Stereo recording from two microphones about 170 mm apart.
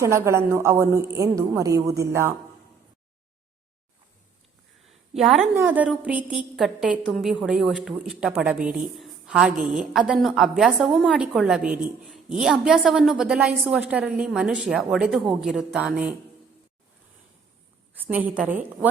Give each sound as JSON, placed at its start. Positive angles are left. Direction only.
{"t": 0.0, "sound": "a woman's voice", "side_deg": -15}
{"t": 4.9, "sound": "a sound", "side_deg": 0}
{"t": 5.5, "sound": "a woman's voice", "side_deg": -10}
{"t": 17.9, "sound": "a woman's voice", "side_deg": -10}